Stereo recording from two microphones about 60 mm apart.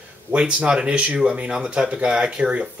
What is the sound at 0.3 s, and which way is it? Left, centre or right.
Speech, centre.